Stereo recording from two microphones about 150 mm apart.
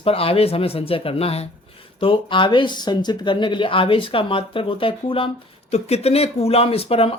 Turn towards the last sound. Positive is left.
turn(degrees=40)  # may be behind; listen again after turning